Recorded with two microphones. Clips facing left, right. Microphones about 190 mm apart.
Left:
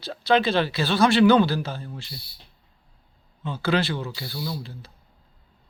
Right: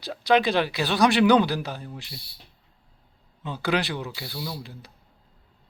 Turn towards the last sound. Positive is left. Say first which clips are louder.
# left 2 dB
turn(degrees=-15)  # may be behind; listen again after turning